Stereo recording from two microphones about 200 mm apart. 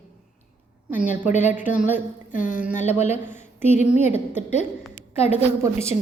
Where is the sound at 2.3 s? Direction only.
40° left (ahead or behind).